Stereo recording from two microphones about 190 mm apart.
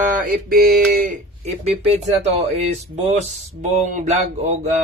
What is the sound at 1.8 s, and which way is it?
Speech, 35° right (ahead or behind).